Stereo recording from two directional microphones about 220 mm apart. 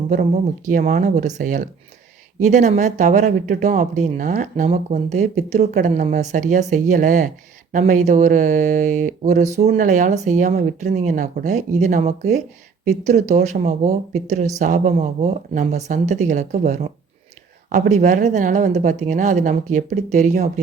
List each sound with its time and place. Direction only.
0.1 s speech: 35° right (ahead or behind)